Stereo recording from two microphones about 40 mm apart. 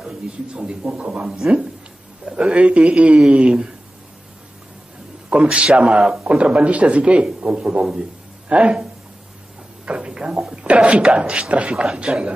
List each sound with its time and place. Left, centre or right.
0.0 s speech: right
1.4 s speech: centre
5.3 s speech: right
9.8 s a sound: right
10.1 s speech: right